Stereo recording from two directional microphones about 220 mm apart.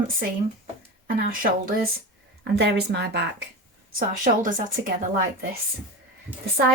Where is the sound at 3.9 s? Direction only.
35° right (ahead or behind).